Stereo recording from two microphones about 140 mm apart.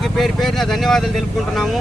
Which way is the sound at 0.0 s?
Centre (ahead or behind).